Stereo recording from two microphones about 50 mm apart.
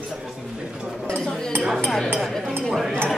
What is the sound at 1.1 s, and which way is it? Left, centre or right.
Speech, centre.